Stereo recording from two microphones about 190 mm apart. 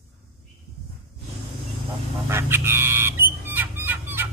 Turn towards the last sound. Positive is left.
turn(degrees=-10)  # may be behind; listen again after turning